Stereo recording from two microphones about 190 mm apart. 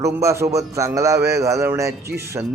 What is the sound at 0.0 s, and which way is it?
A man's voice, 15° right (ahead or behind).